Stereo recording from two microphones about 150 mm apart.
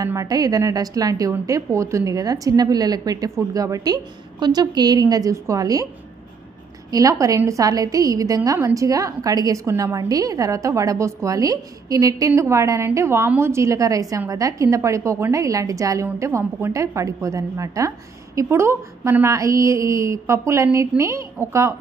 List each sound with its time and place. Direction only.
0.0 s a woman's voice: 20° right (ahead or behind)
6.9 s a woman's voice: 25° right (ahead or behind)